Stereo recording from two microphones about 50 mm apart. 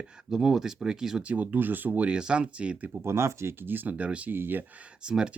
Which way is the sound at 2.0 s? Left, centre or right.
Centre.